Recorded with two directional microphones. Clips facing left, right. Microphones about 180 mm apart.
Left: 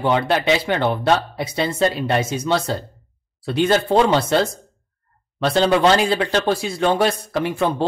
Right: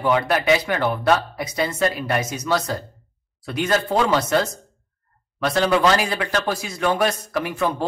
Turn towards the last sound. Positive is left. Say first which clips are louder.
# left 3 dB
turn(degrees=30)  # may be behind; listen again after turning